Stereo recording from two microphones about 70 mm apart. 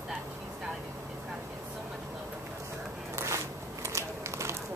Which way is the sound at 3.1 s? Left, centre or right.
Right.